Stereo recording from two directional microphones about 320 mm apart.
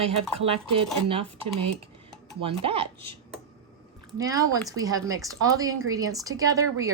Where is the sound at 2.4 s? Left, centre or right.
Centre.